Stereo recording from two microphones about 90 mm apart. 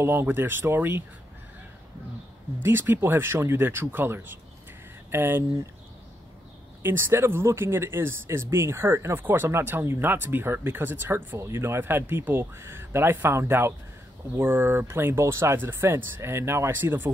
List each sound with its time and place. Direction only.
0.0 s speech: 25° right (ahead or behind)
2.6 s speech: 25° right (ahead or behind)
6.8 s speech: 25° right (ahead or behind)